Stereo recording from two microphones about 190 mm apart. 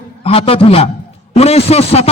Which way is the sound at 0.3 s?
30° left (ahead or behind).